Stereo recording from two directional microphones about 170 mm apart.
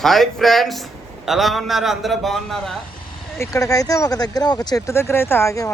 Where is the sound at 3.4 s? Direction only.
20° left (ahead or behind).